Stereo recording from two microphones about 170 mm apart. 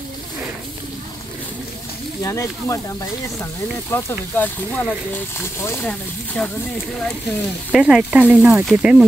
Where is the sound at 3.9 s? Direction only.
10° left (ahead or behind).